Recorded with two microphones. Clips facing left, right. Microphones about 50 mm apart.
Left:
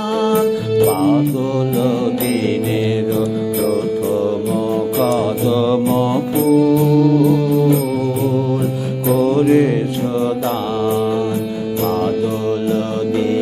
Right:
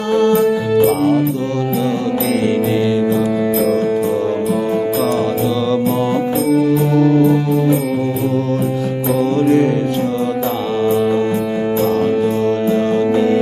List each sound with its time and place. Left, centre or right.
0.2 s music: centre
5.7 s music: centre
6.8 s music: right
9.3 s mantra: centre